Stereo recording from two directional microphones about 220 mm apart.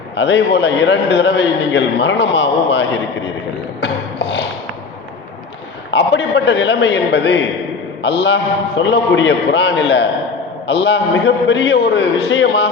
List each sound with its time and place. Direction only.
0.2 s a man's voice: 55° left (ahead or behind)
3.8 s a sound: 50° left (ahead or behind)
5.9 s a man's voice: 55° left (ahead or behind)